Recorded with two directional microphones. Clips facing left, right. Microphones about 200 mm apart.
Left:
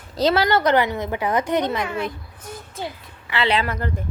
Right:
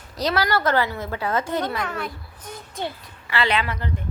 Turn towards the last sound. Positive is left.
turn(degrees=45)  # may be behind; listen again after turning